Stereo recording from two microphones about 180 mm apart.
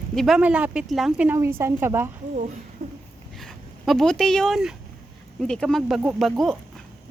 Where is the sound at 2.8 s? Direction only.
45° right (ahead or behind).